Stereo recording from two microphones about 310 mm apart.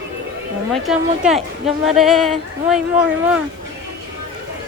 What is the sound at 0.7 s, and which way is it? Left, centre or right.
A woman's voice, centre.